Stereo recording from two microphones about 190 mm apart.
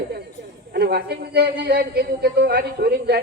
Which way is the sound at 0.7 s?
55° right (ahead or behind).